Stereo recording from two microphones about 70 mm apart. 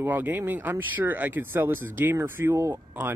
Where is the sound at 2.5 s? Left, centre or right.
Right.